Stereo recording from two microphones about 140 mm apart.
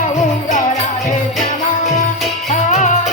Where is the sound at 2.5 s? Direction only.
60° left (ahead or behind).